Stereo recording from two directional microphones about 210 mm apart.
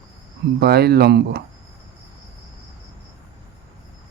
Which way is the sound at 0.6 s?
50° right (ahead or behind).